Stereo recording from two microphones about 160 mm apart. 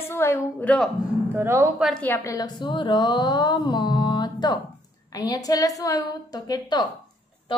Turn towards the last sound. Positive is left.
turn(degrees=25)  # may be behind; listen again after turning